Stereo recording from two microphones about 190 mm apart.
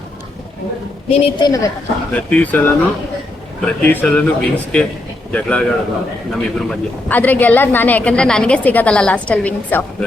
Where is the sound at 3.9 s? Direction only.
5° left (ahead or behind).